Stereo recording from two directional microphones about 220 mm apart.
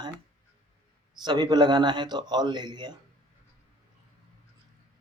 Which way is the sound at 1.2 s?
20° right (ahead or behind).